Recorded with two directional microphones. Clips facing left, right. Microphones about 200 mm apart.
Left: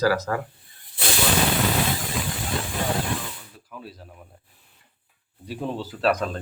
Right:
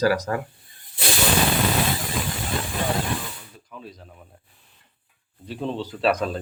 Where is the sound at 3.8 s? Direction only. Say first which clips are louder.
Even; 5° left (ahead or behind).